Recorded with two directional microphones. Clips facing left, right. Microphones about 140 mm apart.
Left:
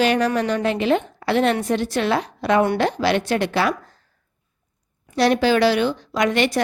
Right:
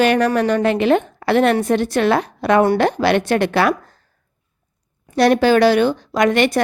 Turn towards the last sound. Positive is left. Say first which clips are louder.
# right 4 dB
turn(degrees=-55)  # may be behind; listen again after turning